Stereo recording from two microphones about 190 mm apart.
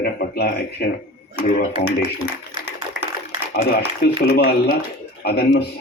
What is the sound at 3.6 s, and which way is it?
A man's voice, 55° left (ahead or behind).